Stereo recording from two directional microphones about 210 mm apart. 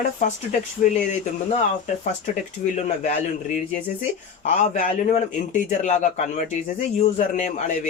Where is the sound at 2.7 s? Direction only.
35° left (ahead or behind).